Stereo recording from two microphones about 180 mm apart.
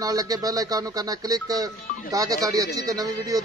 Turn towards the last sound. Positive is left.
turn(degrees=-20)  # may be behind; listen again after turning